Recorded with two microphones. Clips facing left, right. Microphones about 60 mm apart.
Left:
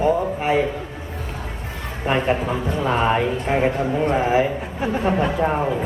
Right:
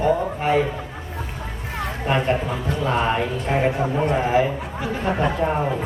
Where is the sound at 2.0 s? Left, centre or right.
Centre.